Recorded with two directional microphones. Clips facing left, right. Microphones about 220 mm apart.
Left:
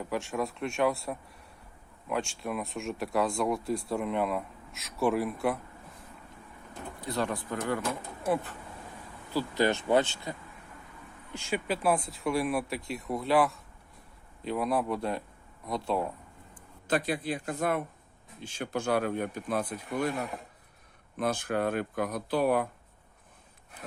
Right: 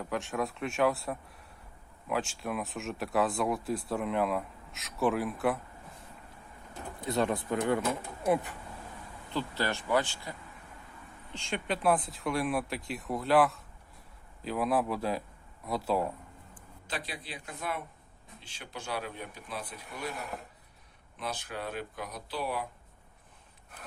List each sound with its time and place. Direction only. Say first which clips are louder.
0.0 s speech: left 1 dB; centre (ahead or behind)
7.0 s speech: right 2 dB; 20° right (ahead or behind)
9.3 s speech: left 5 dB; 10° left (ahead or behind)
9.6 s speech: left 5 dB; 20° left (ahead or behind)
11.3 s speech: left 3 dB; 5° left (ahead or behind)
16.8 s speech: left 11 dB; 50° left (ahead or behind)
21.2 s speech: left 9 dB; 50° left (ahead or behind)